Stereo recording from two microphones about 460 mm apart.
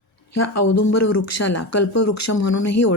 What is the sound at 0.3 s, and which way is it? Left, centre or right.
Speech, left.